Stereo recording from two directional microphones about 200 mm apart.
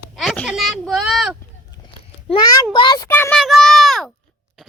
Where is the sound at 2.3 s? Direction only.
25° left (ahead or behind).